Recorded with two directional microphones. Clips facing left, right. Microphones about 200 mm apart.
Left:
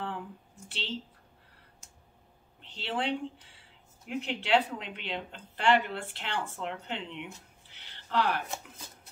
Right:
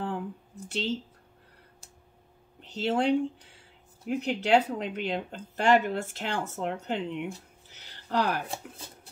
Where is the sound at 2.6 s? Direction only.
40° right (ahead or behind).